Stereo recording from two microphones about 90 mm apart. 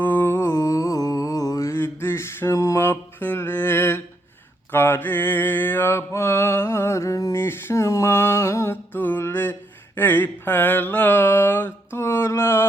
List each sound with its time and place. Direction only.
0.0 s music: 25° left (ahead or behind)
4.7 s mantra: 25° left (ahead or behind)